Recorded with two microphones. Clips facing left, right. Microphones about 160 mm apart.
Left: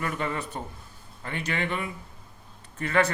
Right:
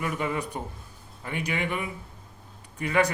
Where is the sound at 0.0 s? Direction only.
10° right (ahead or behind).